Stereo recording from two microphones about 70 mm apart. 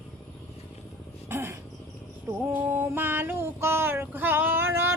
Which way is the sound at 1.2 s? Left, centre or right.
Right.